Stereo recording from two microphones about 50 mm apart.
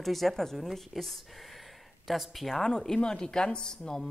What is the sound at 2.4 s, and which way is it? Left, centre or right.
Speech, centre.